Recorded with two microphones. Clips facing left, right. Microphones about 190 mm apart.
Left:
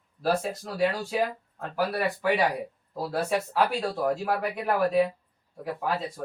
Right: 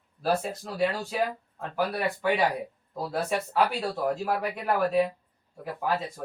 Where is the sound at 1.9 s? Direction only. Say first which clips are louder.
Left 2 dB; 5° left (ahead or behind).